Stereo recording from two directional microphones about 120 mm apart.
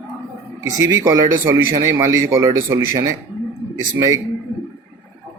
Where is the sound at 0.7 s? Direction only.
30° right (ahead or behind).